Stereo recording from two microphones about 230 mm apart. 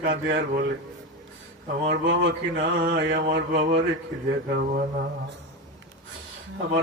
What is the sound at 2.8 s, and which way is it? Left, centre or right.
Speech, right.